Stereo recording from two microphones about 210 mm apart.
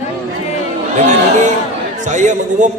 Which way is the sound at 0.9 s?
35° right (ahead or behind).